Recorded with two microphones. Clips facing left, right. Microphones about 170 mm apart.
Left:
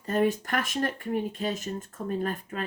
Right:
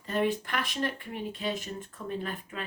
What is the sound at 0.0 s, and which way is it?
Speech, 40° left (ahead or behind).